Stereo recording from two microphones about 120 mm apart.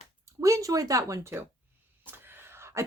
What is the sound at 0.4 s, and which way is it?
Speech, 30° right (ahead or behind).